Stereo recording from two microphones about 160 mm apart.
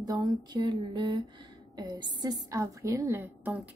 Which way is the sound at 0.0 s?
25° right (ahead or behind).